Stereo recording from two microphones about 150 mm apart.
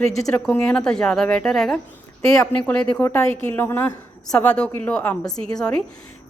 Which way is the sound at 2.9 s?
20° left (ahead or behind).